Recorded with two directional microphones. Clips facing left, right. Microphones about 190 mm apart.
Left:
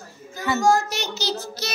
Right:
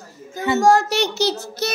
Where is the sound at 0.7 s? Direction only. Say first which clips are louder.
Right 4 dB; 70° right (ahead or behind).